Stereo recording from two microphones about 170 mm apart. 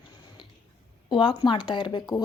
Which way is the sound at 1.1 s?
30° left (ahead or behind).